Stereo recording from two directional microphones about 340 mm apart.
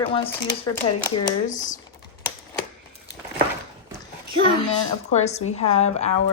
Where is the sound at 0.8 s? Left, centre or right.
Left.